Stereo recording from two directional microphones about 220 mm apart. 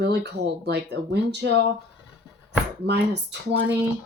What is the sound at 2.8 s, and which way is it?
Speech, 50° right (ahead or behind).